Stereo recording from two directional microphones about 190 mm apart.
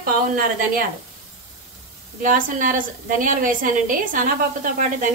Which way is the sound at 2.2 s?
45° right (ahead or behind).